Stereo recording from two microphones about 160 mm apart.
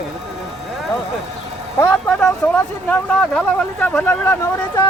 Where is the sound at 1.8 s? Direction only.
15° left (ahead or behind).